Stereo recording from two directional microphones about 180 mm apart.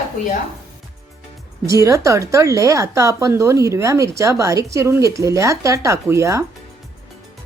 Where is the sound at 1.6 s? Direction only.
15° right (ahead or behind).